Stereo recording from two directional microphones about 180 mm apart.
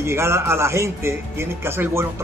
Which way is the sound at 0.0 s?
15° right (ahead or behind).